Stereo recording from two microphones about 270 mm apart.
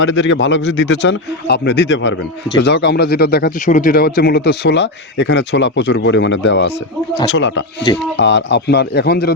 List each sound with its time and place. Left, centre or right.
0.0 s a man's voice: left